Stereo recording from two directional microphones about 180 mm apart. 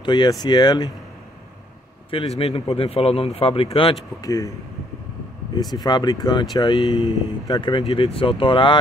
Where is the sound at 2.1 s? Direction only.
30° left (ahead or behind).